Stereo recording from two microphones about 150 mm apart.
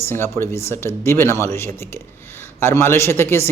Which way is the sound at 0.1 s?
15° left (ahead or behind).